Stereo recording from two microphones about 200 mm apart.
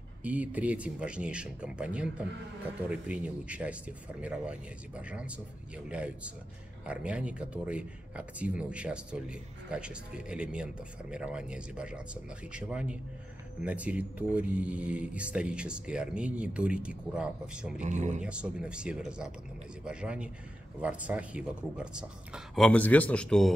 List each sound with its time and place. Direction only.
0.2 s speech: 5° right (ahead or behind)
17.8 s speech: 35° right (ahead or behind)
18.2 s speech: 5° right (ahead or behind)